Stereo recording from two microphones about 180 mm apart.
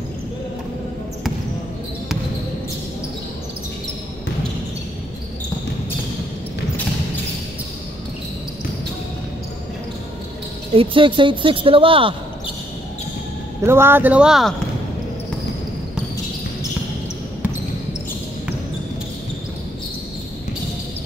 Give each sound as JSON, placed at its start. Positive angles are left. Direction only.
{"t": 10.7, "sound": "a woman's voice", "side_deg": -30}
{"t": 13.6, "sound": "speech", "side_deg": -15}